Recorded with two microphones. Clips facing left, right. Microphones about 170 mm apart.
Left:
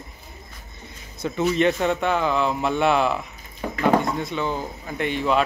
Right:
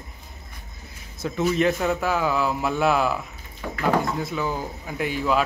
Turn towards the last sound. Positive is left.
turn(degrees=-5)  # may be behind; listen again after turning